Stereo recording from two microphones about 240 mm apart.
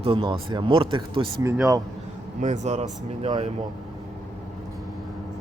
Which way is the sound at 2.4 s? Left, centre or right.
Right.